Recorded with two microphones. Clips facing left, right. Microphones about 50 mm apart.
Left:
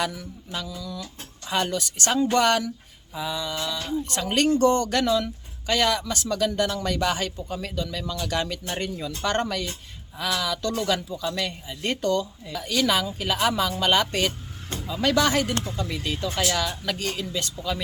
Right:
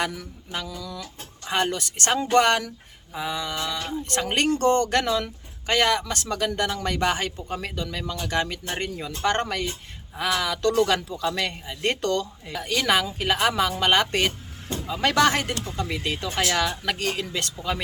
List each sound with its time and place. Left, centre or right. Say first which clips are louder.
0.5 s speech: right 1 dB; right
1.5 s speech: right 1 dB; right
12.5 s speech: right 1 dB; right
16.2 s speech: right 1 dB; right